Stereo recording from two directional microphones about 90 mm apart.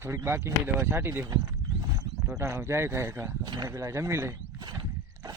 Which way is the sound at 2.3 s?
30° right (ahead or behind).